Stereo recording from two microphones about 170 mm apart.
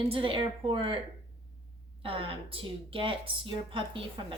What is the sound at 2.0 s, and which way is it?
A woman's voice, 30° right (ahead or behind).